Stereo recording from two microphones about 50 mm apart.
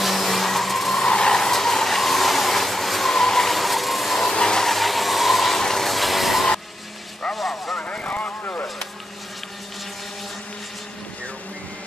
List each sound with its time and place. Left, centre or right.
0.0 s vehicle: centre
1.0 s vehicle: centre
4.3 s vehicle: centre
4.6 s vehicle: centre
7.3 s a sound: centre
7.7 s vehicle: left